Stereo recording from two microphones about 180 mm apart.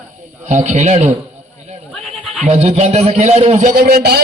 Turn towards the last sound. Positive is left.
turn(degrees=-60)  # may be behind; listen again after turning